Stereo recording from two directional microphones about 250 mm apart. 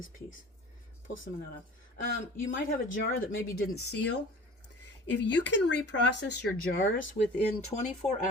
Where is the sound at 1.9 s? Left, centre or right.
Left.